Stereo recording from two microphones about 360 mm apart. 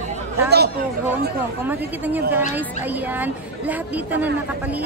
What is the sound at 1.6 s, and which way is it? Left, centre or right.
Speech, centre.